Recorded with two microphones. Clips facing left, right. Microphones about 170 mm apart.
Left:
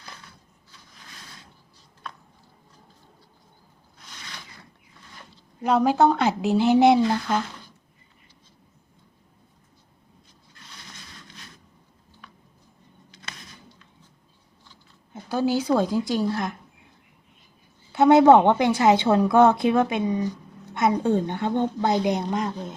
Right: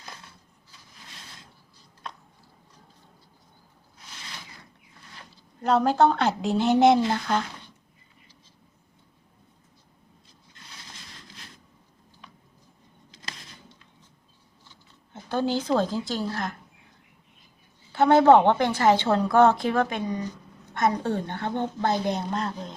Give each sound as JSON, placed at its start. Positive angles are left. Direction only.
{"t": 5.5, "sound": "a woman's voice", "side_deg": 10}
{"t": 15.1, "sound": "a woman's voice", "side_deg": 5}
{"t": 17.9, "sound": "a woman's voice", "side_deg": 20}